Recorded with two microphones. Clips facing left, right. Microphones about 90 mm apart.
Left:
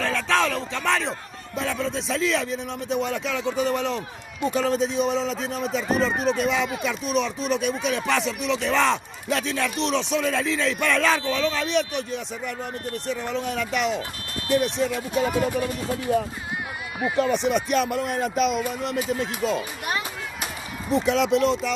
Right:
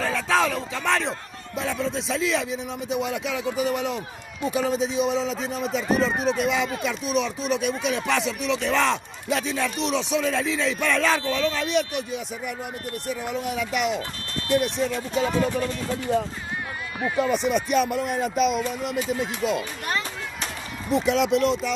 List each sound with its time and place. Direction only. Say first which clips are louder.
0.0 s a man's voice: even; 5° right (ahead or behind)
3.4 s speech: left 1 dB; 35° left (ahead or behind)
3.7 s a man's voice: left 1 dB; 5° right (ahead or behind)
14.9 s speech: even; 5° left (ahead or behind)
17.2 s a man's voice: left 1 dB; centre (ahead or behind)
20.9 s a man's voice: even; centre (ahead or behind)